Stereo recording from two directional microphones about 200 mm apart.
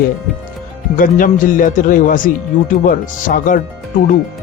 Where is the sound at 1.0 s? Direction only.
45° left (ahead or behind).